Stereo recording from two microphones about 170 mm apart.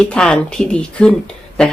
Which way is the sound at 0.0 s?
5° left (ahead or behind).